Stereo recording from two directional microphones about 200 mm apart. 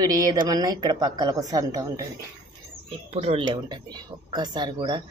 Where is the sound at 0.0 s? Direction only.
20° right (ahead or behind).